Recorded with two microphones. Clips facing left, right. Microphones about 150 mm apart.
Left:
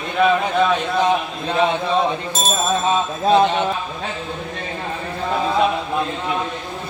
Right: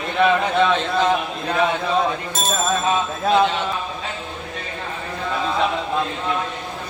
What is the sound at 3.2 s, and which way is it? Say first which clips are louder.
Speech: left 3 dB; 35° left (ahead or behind).